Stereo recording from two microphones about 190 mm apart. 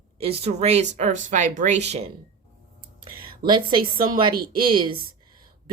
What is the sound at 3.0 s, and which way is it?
A woman's voice, 25° right (ahead or behind).